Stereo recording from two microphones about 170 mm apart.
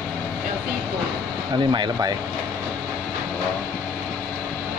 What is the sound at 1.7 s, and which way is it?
Speech, 25° right (ahead or behind).